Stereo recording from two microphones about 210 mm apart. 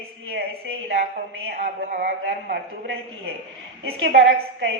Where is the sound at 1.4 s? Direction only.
40° right (ahead or behind).